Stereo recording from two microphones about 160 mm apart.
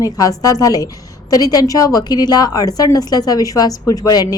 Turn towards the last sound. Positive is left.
turn(degrees=25)  # may be behind; listen again after turning